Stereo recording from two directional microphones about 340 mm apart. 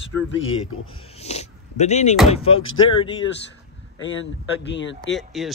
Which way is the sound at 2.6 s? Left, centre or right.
Left.